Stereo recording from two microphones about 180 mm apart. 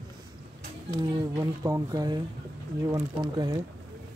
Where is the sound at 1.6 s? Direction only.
20° right (ahead or behind).